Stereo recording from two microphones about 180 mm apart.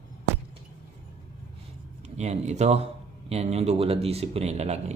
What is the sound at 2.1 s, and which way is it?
A man's voice, 40° right (ahead or behind).